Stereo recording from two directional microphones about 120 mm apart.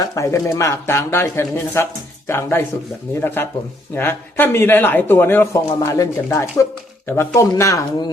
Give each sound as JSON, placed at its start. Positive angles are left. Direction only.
{"t": 0.0, "sound": "a man's voice", "side_deg": 30}